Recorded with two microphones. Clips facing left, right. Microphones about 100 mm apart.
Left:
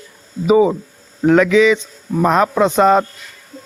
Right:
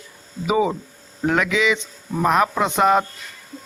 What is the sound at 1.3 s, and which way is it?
Speech, 15° right (ahead or behind).